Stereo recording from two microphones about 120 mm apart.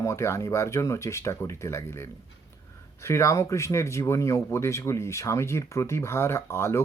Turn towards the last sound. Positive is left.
turn(degrees=20)  # may be behind; listen again after turning